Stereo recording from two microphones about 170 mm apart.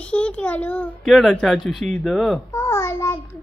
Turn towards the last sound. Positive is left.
turn(degrees=15)  # may be behind; listen again after turning